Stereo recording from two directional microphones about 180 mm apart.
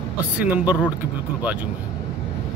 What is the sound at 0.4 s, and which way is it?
Speech, 10° right (ahead or behind).